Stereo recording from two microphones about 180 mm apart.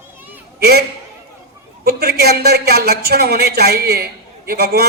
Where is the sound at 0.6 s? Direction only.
60° right (ahead or behind).